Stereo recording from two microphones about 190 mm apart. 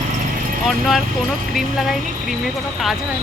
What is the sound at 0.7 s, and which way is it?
Speech, centre (ahead or behind).